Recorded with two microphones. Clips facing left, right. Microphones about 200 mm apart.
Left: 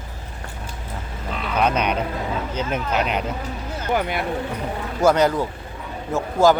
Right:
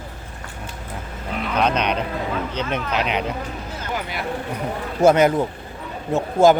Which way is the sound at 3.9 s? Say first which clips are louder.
Left 6 dB; 55° left (ahead or behind).